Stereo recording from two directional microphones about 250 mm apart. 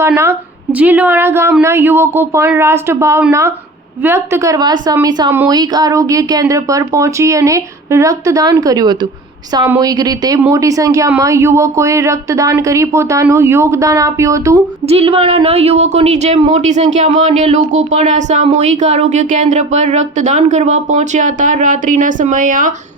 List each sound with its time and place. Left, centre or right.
0.0 s a woman's voice: centre
14.8 s speech: right